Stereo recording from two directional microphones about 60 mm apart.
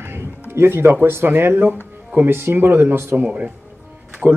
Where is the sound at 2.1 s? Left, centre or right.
Right.